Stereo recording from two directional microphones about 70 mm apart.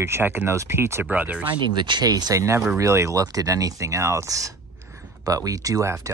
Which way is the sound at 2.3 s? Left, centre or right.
Right.